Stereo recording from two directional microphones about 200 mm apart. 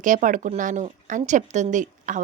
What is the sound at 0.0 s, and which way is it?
A woman's voice, 40° right (ahead or behind).